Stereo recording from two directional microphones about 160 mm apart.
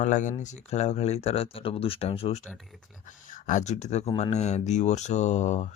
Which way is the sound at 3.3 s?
55° left (ahead or behind).